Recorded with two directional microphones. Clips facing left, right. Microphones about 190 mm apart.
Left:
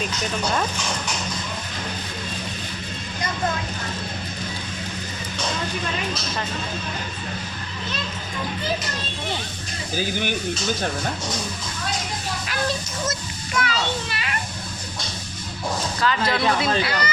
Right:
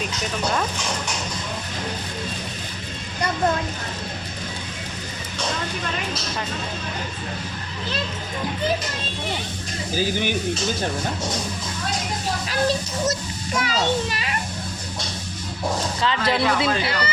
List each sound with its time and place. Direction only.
10.0 s speech: 50° left (ahead or behind)
12.5 s a child's voice: 35° right (ahead or behind)
16.0 s speech: 25° right (ahead or behind)